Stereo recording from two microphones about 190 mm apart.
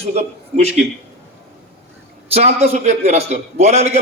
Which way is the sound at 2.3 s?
35° right (ahead or behind).